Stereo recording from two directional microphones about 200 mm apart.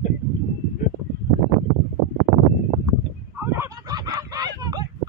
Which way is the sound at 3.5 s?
15° right (ahead or behind).